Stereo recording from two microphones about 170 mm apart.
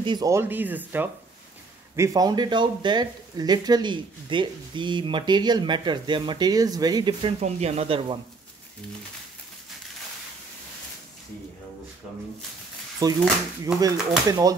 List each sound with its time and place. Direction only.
0.0 s speech: 25° right (ahead or behind)
13.0 s speech: 20° right (ahead or behind)